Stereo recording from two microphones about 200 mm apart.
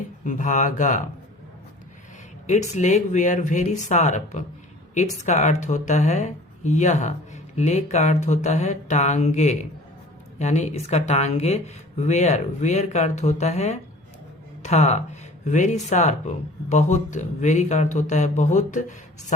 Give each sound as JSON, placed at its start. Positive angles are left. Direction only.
{"t": 0.3, "sound": "speech", "side_deg": 40}
{"t": 2.5, "sound": "speech", "side_deg": 35}